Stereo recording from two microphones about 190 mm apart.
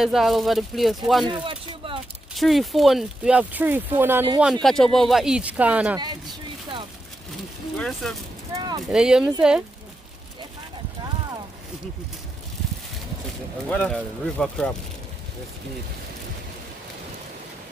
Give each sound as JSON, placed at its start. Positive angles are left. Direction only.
{"t": 0.0, "sound": "speech", "side_deg": 0}
{"t": 1.2, "sound": "speech", "side_deg": -25}
{"t": 2.3, "sound": "speech", "side_deg": 0}
{"t": 4.4, "sound": "speech", "side_deg": 0}
{"t": 7.8, "sound": "speech", "side_deg": 0}
{"t": 8.5, "sound": "a sound", "side_deg": -20}
{"t": 8.8, "sound": "speech", "side_deg": -5}
{"t": 13.7, "sound": "speech", "side_deg": 5}